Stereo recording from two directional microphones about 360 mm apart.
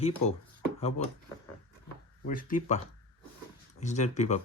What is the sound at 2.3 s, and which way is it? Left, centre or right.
Speech, left.